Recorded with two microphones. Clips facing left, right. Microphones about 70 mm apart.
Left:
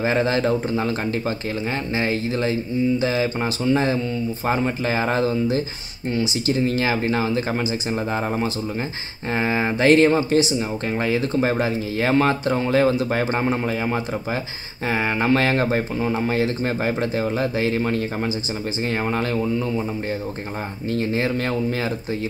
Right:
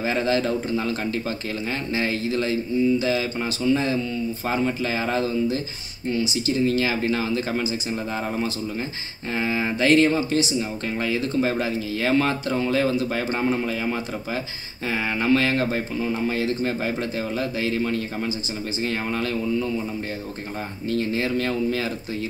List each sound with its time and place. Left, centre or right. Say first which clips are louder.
0.0 s speech: left 3 dB; left
1.7 s speech: left 2 dB; left
3.6 s speech: left 1 dB; left
6.8 s speech: left 2 dB; left
19.1 s speech: left 3 dB; left
20.9 s speech: left 1 dB; left